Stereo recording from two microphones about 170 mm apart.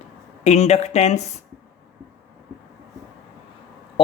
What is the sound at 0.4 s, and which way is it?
Speech, 40° left (ahead or behind).